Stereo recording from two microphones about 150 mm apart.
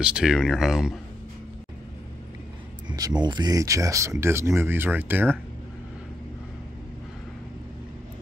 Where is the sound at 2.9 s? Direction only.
25° right (ahead or behind).